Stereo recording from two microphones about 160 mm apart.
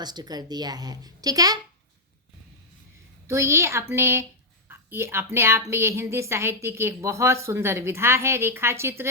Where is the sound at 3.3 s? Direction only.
20° right (ahead or behind).